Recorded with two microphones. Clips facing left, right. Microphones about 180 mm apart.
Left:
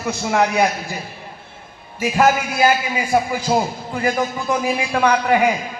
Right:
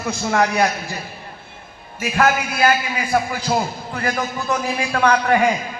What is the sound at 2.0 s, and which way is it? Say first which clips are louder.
A man's voice: left 2 dB; 15° left (ahead or behind).